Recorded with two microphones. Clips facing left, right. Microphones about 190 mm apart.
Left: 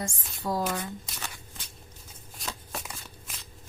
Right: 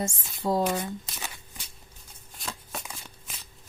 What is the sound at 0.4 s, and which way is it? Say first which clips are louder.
Speech: right 4 dB; 25° right (ahead or behind).